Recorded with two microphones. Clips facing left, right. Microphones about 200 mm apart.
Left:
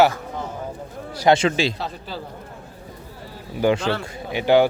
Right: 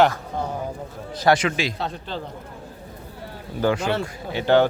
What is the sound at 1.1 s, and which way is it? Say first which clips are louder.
Speech: left 2 dB; 25° left (ahead or behind).